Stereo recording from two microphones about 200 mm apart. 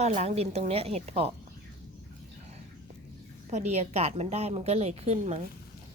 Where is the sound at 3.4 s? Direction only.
35° right (ahead or behind).